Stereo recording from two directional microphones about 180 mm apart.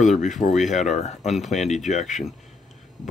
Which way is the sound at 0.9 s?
40° left (ahead or behind).